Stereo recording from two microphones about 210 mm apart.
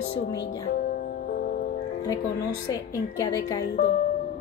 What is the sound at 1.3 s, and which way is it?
Music, 45° left (ahead or behind).